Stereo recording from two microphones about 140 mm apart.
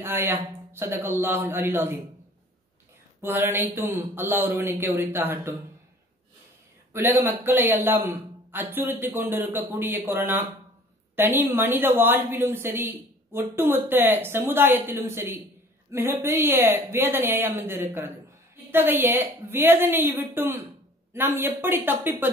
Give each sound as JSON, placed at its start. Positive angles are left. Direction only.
{"t": 0.0, "sound": "a woman's voice", "side_deg": -15}
{"t": 3.2, "sound": "a woman's voice", "side_deg": -15}
{"t": 6.9, "sound": "a woman's voice", "side_deg": -20}